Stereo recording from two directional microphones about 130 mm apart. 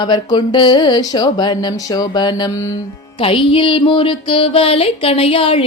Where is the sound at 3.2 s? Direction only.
45° left (ahead or behind).